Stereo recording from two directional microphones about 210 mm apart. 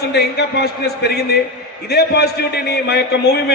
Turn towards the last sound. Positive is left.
turn(degrees=50)  # may be behind; listen again after turning